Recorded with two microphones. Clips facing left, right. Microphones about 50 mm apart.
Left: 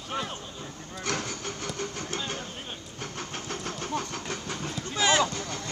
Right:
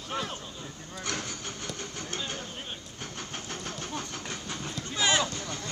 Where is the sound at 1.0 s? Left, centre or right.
Left.